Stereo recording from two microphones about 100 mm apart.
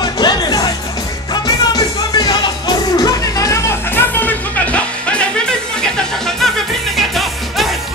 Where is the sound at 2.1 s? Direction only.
40° left (ahead or behind).